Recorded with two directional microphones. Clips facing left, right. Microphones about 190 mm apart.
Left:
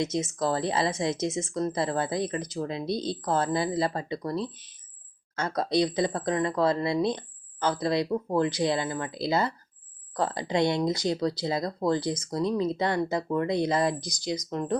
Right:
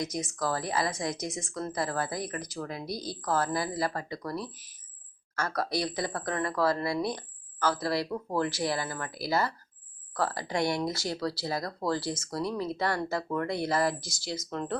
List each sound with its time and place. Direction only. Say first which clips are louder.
0.0 s speech: left 5 dB; 25° left (ahead or behind)